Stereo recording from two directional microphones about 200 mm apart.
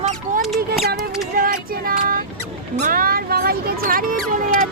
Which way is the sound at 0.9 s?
45° right (ahead or behind).